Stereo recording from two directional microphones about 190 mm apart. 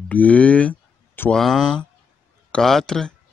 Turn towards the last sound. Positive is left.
turn(degrees=5)  # may be behind; listen again after turning